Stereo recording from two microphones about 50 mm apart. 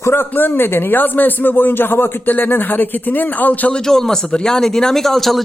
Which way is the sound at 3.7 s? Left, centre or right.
Centre.